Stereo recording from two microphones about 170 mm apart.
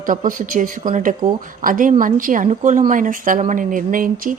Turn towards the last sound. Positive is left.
turn(degrees=-50)  # may be behind; listen again after turning